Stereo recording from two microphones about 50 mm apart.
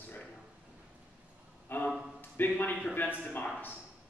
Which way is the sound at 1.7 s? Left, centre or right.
Left.